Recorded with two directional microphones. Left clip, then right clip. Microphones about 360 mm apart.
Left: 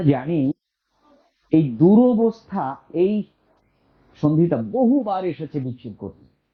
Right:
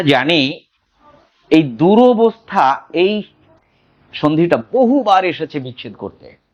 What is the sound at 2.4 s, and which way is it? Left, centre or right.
Speech, centre.